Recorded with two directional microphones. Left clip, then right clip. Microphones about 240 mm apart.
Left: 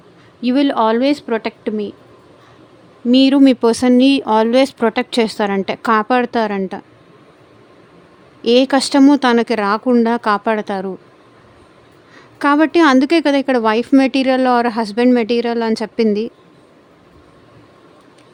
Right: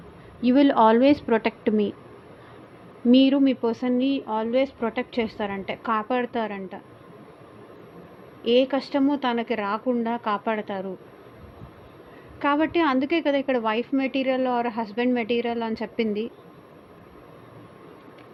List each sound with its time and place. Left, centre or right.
0.4 s a woman's voice: left
3.1 s speech: left
8.4 s speech: left
12.4 s speech: left